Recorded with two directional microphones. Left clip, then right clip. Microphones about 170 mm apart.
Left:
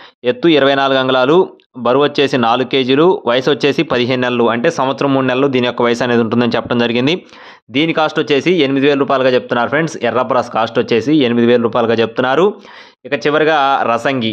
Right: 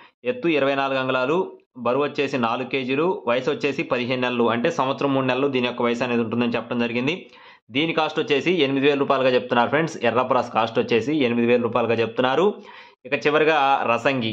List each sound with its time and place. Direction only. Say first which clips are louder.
0.2 s speech: left 10 dB; 50° left (ahead or behind)
7.7 s a man's voice: left 8 dB; 40° left (ahead or behind)